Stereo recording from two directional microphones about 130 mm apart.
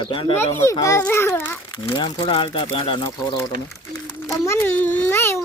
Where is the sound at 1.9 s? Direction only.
40° left (ahead or behind).